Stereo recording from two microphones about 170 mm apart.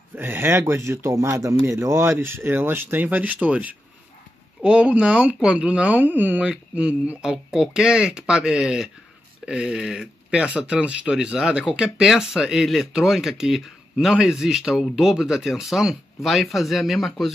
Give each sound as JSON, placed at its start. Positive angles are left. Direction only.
{"t": 0.1, "sound": "speech", "side_deg": -10}